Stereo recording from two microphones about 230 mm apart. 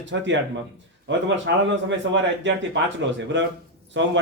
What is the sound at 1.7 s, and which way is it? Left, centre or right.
Speech, right.